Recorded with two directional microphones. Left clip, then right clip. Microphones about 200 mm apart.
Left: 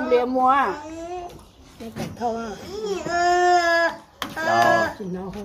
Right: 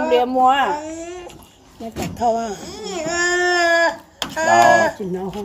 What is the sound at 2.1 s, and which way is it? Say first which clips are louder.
Speech: right 8 dB; 45° right (ahead or behind).